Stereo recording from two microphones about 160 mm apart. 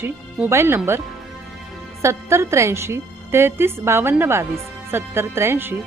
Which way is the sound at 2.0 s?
15° right (ahead or behind).